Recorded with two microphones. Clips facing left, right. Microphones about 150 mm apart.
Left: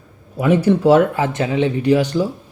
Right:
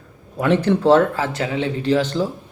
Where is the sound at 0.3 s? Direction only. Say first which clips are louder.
Left 2 dB; 10° left (ahead or behind).